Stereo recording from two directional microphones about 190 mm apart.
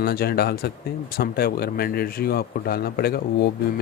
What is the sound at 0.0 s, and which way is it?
Speech, 55° left (ahead or behind).